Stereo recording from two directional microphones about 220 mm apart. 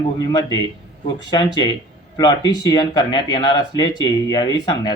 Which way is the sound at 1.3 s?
20° left (ahead or behind).